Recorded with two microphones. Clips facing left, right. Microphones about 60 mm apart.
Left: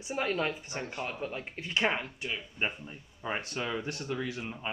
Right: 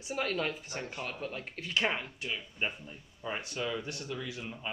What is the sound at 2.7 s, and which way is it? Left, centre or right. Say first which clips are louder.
Speech: left 2 dB; left.